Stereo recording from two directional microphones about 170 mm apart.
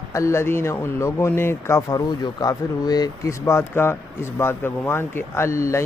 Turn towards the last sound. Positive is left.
turn(degrees=15)  # may be behind; listen again after turning